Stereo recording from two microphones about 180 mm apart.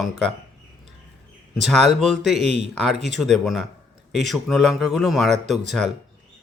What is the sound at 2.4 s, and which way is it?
Speech, 35° right (ahead or behind).